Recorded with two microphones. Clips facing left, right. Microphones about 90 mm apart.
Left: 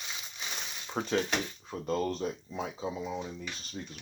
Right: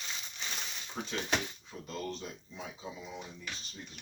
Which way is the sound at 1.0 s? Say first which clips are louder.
Left 7 dB; 60° left (ahead or behind).